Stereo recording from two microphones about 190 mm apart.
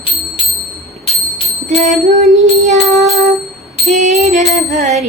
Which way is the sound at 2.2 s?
35° right (ahead or behind).